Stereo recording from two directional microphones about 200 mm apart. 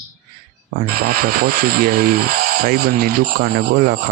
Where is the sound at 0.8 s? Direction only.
50° right (ahead or behind).